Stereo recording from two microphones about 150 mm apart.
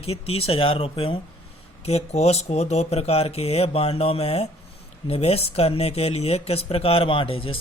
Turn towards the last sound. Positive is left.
turn(degrees=35)  # may be behind; listen again after turning